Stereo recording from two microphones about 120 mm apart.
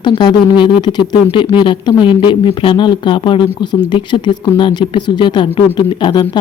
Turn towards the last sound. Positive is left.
turn(degrees=35)  # may be behind; listen again after turning